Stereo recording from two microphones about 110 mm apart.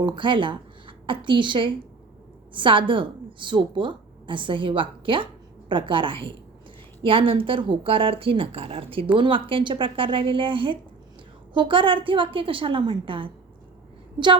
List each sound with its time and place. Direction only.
0.0 s a woman's voice: 45° right (ahead or behind)